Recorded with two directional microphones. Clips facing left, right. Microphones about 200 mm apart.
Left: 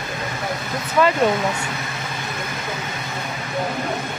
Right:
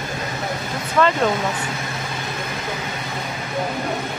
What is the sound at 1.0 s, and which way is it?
Speech, 10° left (ahead or behind).